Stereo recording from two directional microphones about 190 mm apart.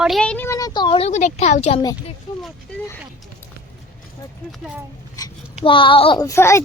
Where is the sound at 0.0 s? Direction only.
Centre (ahead or behind); by 1.8 s 35° left (ahead or behind).